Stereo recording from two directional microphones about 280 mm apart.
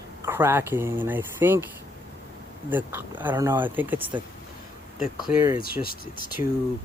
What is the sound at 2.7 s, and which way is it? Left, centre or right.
Speech, centre.